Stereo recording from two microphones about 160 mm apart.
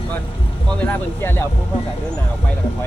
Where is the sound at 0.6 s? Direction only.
10° left (ahead or behind).